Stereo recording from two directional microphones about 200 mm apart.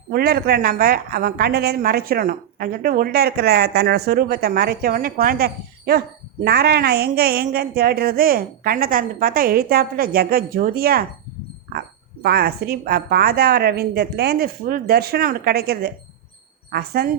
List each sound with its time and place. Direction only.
0.1 s a woman's voice: 50° right (ahead or behind)
12.2 s a woman's voice: 50° right (ahead or behind)